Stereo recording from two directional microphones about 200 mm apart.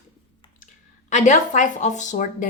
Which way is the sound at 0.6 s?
35° left (ahead or behind).